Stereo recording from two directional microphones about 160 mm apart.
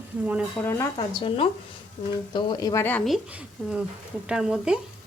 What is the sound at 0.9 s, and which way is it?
Speech, 35° left (ahead or behind).